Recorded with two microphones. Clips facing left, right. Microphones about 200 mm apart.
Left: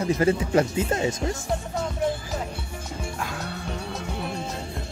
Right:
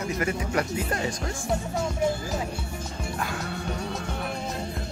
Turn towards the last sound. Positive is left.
turn(degrees=0)  # may be behind; listen again after turning